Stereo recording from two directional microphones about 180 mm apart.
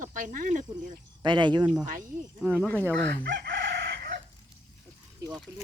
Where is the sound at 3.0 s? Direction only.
75° right (ahead or behind).